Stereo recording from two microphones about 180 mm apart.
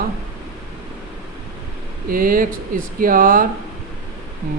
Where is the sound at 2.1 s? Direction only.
50° right (ahead or behind).